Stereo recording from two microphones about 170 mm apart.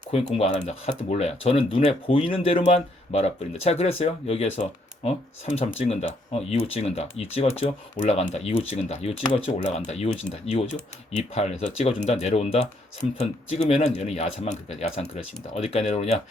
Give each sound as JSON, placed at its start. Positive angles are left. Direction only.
{"t": 0.1, "sound": "speech", "side_deg": 40}